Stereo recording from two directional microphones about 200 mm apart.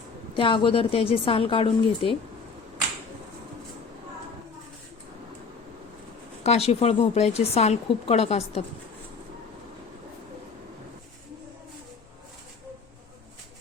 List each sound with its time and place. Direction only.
0.3 s a woman's voice: 25° left (ahead or behind)
6.4 s a woman's voice: 30° left (ahead or behind)